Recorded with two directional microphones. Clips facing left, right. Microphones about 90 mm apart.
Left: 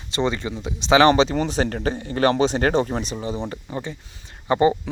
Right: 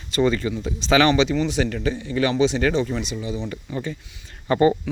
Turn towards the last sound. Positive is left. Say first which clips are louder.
# even
turn(degrees=20)  # may be behind; listen again after turning